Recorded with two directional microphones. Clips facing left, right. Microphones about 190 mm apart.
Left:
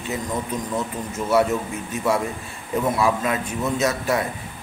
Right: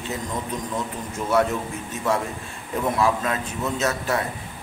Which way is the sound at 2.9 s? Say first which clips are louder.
Left 1 dB; 10° left (ahead or behind).